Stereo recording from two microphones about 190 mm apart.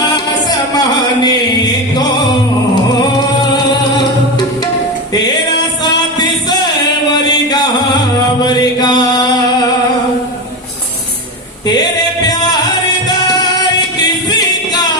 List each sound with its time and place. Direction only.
0.7 s music: 20° left (ahead or behind)
3.5 s music: 20° left (ahead or behind)
5.8 s music: 20° left (ahead or behind)
7.1 s a sound: 20° left (ahead or behind)
8.4 s chant: 20° left (ahead or behind)
11.6 s music: 20° left (ahead or behind)
14.0 s singing: 20° left (ahead or behind)